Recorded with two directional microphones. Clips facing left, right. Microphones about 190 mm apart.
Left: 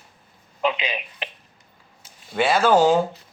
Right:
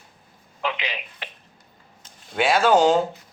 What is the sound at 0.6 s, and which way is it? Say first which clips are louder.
Telephone: left 4 dB; 20° left (ahead or behind).